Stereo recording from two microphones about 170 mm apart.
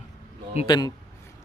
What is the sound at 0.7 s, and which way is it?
Speech, 25° left (ahead or behind).